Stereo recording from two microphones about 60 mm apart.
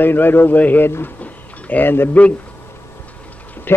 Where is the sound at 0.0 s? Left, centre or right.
Left.